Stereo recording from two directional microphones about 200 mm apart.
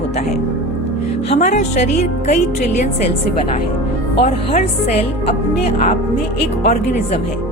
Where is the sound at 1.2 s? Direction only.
35° left (ahead or behind).